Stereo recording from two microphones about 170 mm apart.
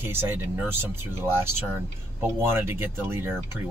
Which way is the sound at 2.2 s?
15° right (ahead or behind).